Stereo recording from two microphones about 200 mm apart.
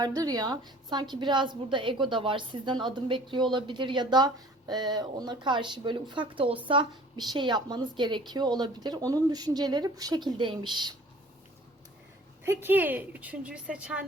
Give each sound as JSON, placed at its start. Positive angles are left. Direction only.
{"t": 0.0, "sound": "speech", "side_deg": -20}
{"t": 12.5, "sound": "a woman's voice", "side_deg": -10}